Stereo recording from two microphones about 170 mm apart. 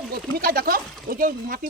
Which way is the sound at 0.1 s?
60° right (ahead or behind).